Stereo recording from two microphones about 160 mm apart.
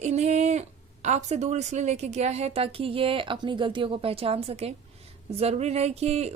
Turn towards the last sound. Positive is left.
turn(degrees=-45)  # may be behind; listen again after turning